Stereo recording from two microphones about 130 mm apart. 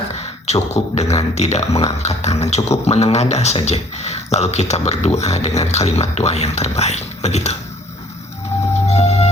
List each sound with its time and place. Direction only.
0.1 s a sound: 55° left (ahead or behind)
0.7 s speech: 55° left (ahead or behind)
8.7 s music: 55° left (ahead or behind)